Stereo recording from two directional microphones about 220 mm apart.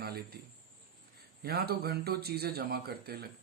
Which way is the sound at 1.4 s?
45° right (ahead or behind).